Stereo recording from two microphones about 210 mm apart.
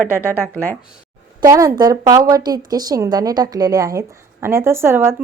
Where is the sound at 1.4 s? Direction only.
15° right (ahead or behind).